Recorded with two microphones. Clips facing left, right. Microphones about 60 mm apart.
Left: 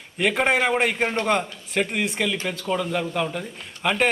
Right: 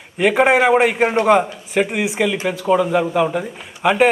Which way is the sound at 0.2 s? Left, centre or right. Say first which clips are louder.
Right 7 dB; centre.